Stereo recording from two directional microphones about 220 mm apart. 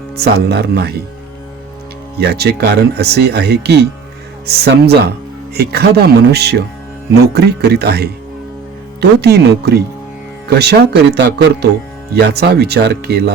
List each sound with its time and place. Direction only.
0.2 s speech: 45° right (ahead or behind)
2.1 s speech: 45° right (ahead or behind)